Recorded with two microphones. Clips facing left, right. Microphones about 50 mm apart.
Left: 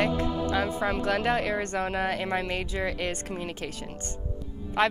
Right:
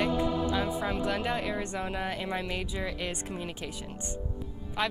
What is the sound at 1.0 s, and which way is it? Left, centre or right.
Speech, left.